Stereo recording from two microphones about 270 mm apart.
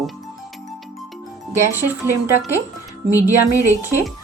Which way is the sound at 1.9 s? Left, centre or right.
Centre.